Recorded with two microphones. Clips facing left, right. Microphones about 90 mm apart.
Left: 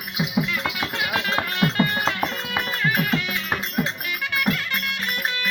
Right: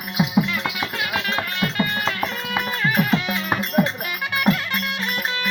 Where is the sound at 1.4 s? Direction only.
30° left (ahead or behind).